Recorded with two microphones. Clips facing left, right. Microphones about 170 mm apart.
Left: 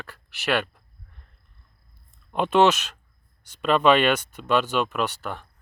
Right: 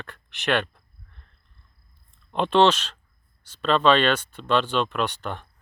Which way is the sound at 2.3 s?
10° left (ahead or behind).